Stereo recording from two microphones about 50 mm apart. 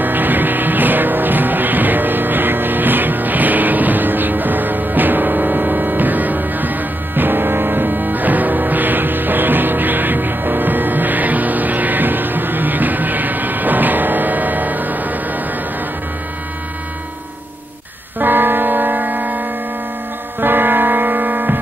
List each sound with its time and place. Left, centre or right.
0.0 s music: right
18.2 s music: right